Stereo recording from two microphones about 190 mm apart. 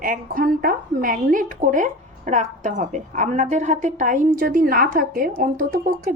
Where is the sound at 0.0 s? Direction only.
50° right (ahead or behind).